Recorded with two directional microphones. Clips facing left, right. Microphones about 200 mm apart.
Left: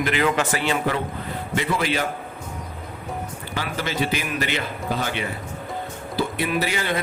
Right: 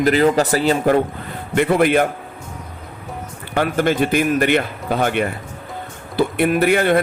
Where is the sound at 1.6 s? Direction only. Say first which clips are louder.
Right 10 dB; 55° right (ahead or behind).